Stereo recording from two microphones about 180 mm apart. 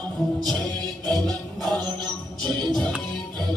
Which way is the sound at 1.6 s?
25° right (ahead or behind).